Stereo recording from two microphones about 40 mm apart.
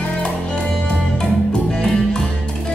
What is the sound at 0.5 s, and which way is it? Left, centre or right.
Music, left.